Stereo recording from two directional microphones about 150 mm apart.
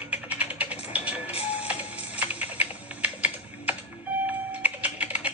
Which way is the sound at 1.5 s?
10° right (ahead or behind).